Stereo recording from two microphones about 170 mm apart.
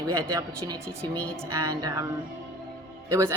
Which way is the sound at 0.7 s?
25° right (ahead or behind).